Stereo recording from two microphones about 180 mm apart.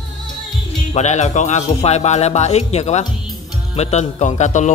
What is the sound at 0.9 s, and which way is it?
Speech, 40° left (ahead or behind).